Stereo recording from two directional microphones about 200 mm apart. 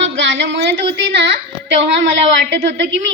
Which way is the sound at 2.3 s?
65° right (ahead or behind).